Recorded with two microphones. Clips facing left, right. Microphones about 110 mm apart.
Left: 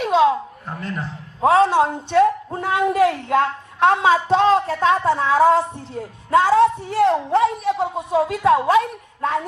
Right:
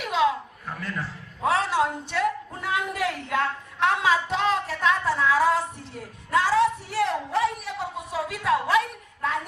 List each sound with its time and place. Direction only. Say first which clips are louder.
0.0 s a man's voice: left 7 dB; 30° left (ahead or behind)